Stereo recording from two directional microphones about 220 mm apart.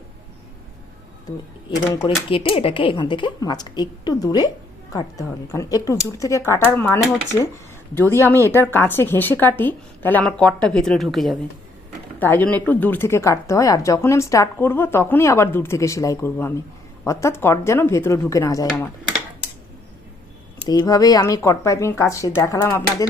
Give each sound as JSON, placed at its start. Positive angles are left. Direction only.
{"t": 1.9, "sound": "speech", "side_deg": 20}
{"t": 20.7, "sound": "speech", "side_deg": 15}